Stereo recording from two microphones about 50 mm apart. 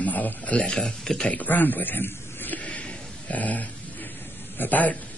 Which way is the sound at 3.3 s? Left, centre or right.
Left.